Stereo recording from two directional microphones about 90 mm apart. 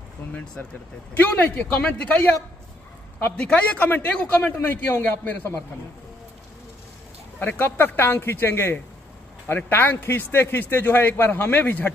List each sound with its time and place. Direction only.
1.1 s speech: 15° left (ahead or behind)
3.3 s a man's voice: 15° left (ahead or behind)
7.3 s a man's voice: 20° left (ahead or behind)